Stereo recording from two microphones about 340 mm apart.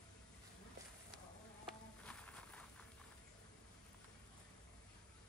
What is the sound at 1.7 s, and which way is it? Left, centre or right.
Insect, centre.